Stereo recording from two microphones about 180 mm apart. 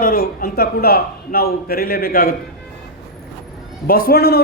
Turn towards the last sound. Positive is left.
turn(degrees=60)  # may be behind; listen again after turning